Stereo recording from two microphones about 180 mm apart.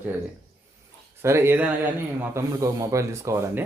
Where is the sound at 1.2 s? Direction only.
15° right (ahead or behind).